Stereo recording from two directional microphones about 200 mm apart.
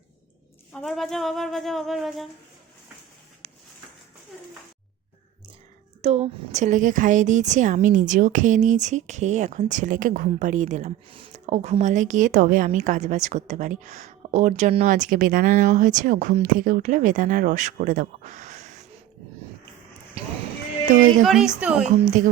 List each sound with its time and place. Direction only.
0.7 s speech: 5° left (ahead or behind)
6.0 s a woman's voice: 30° right (ahead or behind)
21.2 s speech: 5° right (ahead or behind)
21.8 s a woman's voice: 35° right (ahead or behind)